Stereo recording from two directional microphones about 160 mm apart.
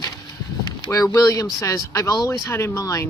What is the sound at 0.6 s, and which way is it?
Speech, 25° left (ahead or behind).